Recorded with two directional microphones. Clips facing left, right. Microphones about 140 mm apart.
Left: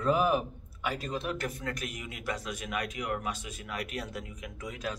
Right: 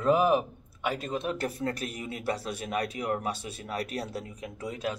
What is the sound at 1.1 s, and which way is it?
A man's voice, 25° right (ahead or behind).